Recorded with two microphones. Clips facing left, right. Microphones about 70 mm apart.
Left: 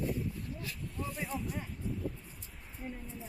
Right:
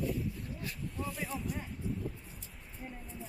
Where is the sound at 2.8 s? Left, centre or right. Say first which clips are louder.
Left 3 dB; centre.